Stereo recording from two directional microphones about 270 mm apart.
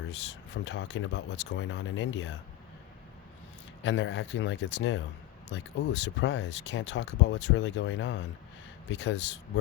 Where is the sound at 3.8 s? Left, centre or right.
Left.